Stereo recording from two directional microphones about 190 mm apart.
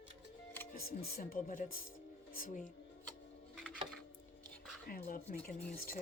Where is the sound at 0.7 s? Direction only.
50° left (ahead or behind).